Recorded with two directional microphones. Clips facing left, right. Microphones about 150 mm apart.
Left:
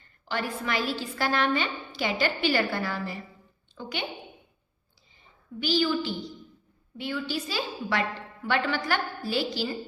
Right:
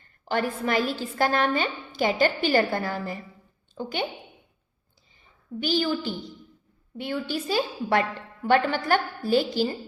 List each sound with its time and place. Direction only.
0.3 s a woman's voice: 45° right (ahead or behind)
5.5 s a woman's voice: 45° right (ahead or behind)